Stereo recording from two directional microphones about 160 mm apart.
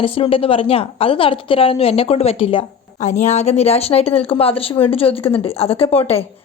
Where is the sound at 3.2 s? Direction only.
45° left (ahead or behind).